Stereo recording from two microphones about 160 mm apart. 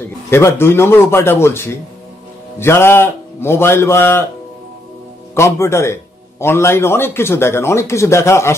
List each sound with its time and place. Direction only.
0.0 s a man's voice: 15° left (ahead or behind)
5.3 s a man's voice: 15° left (ahead or behind)